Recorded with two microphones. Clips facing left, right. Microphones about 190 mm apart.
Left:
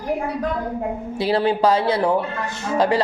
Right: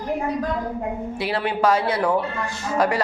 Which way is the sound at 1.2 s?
30° left (ahead or behind).